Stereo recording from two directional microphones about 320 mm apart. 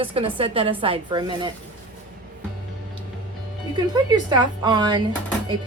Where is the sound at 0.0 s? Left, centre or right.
Centre.